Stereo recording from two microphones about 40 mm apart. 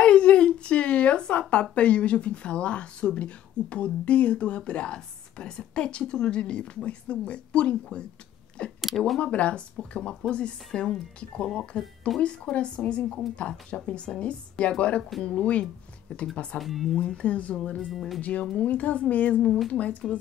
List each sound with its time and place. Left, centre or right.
0.0 s a sound: left
1.5 s speech: left
8.8 s speech: centre
9.2 s a woman's voice: left
16.5 s speech: centre
16.9 s a woman's voice: left
17.7 s speech: centre
18.7 s a woman's voice: left